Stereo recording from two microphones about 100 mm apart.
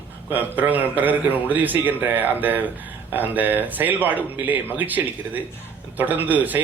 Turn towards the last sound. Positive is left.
turn(degrees=-15)  # may be behind; listen again after turning